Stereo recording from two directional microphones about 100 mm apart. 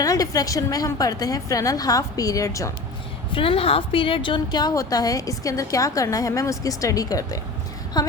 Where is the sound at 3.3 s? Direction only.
60° left (ahead or behind).